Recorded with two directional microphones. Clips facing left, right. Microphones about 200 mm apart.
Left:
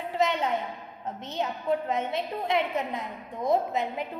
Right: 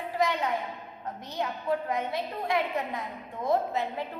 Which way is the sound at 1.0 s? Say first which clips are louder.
Left 2 dB; 25° left (ahead or behind).